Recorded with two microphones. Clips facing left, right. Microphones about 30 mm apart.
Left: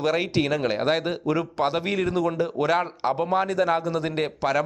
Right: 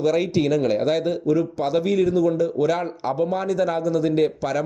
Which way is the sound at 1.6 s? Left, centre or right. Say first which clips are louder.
Right 4 dB; left.